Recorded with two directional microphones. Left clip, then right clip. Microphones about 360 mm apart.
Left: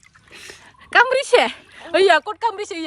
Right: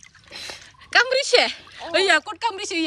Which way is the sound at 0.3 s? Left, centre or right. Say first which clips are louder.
Right 4 dB; centre.